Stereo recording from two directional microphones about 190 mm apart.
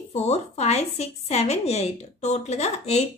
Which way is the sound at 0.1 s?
35° left (ahead or behind).